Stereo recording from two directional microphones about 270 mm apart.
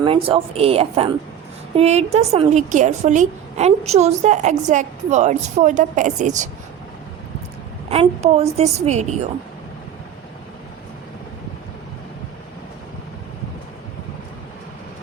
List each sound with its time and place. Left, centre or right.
0.0 s a woman's voice: centre
7.9 s a woman's voice: right